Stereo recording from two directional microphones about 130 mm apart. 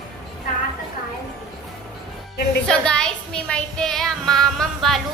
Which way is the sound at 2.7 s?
5° left (ahead or behind).